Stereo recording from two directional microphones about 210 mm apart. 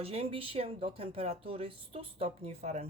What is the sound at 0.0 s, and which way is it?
Speech, 30° right (ahead or behind).